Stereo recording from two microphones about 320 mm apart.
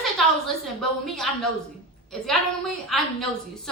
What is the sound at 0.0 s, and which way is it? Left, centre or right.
A woman's voice, centre.